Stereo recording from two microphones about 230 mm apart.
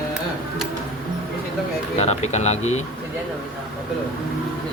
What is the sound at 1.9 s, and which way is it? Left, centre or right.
Speech, left.